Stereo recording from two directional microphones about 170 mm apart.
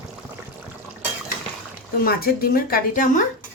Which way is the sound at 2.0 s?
60° left (ahead or behind).